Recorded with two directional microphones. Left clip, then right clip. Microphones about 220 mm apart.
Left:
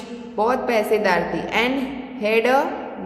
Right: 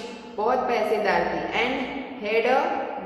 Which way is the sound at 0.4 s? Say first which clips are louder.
Left 3 dB; 50° left (ahead or behind).